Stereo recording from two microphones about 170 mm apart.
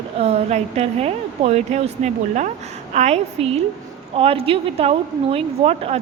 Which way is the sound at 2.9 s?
40° right (ahead or behind).